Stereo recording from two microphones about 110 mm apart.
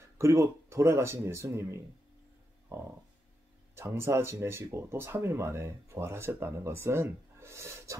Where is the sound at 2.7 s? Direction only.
25° right (ahead or behind).